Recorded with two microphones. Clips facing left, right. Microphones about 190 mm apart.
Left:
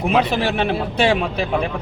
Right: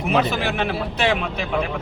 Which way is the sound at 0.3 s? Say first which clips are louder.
Left 3 dB; 30° left (ahead or behind).